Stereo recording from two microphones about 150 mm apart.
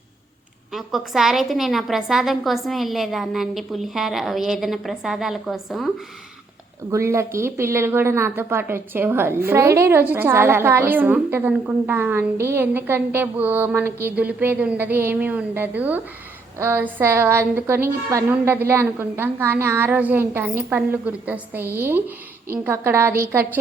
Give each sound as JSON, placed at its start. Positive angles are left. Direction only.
{"t": 0.7, "sound": "a woman's voice", "side_deg": 0}
{"t": 6.9, "sound": "a woman's voice", "side_deg": -20}